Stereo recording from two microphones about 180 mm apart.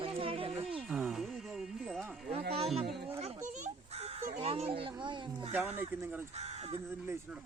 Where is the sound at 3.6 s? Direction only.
35° right (ahead or behind).